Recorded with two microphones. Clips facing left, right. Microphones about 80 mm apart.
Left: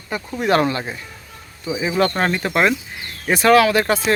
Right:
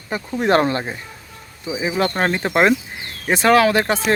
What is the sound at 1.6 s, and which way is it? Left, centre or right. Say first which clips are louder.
Speech: left 2 dB; centre.